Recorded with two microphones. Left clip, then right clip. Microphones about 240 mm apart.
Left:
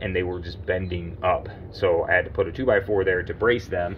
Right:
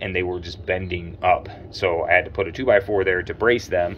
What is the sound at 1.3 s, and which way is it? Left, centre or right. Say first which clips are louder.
Speech: right 4 dB; centre.